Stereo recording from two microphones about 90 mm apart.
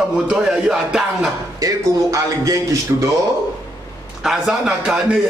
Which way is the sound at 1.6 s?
40° right (ahead or behind).